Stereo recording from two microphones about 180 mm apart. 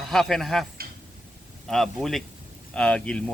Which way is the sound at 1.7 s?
Centre (ahead or behind).